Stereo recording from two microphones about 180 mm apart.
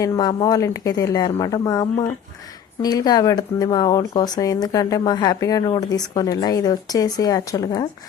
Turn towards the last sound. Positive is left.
turn(degrees=20)  # may be behind; listen again after turning